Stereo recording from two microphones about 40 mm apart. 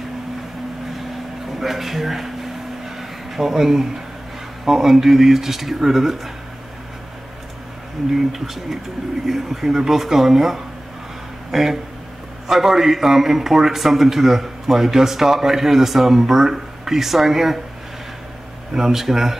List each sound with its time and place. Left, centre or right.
1.6 s speech: centre
3.0 s a sound: centre
4.6 s a man's voice: centre
8.1 s a man's voice: centre
18.7 s a man's voice: centre